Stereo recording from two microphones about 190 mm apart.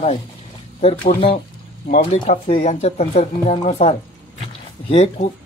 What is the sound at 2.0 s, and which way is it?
Speech, 30° left (ahead or behind).